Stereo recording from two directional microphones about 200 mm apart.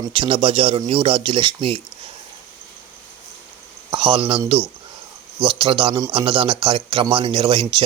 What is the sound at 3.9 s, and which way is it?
Speech, 25° right (ahead or behind).